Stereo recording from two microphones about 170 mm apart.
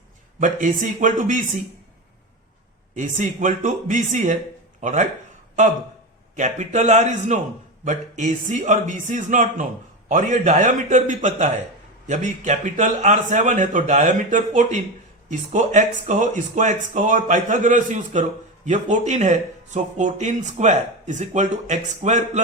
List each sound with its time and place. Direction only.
0.3 s speech: 50° right (ahead or behind)
2.9 s speech: 45° right (ahead or behind)
6.3 s speech: 45° right (ahead or behind)